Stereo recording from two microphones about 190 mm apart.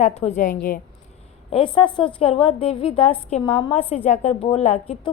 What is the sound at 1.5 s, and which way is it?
A woman's voice, 25° left (ahead or behind).